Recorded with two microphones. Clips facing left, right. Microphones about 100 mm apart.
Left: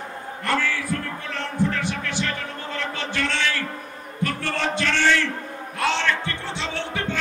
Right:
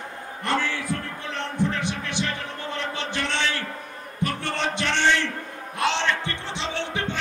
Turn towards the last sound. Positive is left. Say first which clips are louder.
# even
turn(degrees=-20)  # may be behind; listen again after turning